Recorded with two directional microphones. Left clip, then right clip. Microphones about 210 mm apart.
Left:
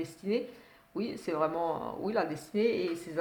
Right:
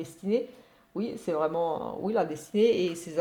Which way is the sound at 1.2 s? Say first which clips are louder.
Right 3 dB; 35° right (ahead or behind).